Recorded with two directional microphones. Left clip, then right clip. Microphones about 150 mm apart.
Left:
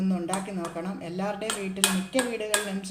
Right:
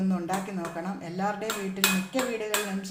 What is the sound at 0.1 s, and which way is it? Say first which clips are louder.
Speech: even; 20° left (ahead or behind).